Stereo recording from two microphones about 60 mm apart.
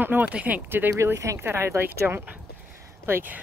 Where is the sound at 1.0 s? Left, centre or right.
Right.